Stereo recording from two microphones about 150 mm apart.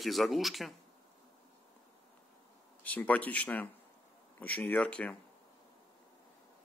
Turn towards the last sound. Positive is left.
turn(degrees=10)  # may be behind; listen again after turning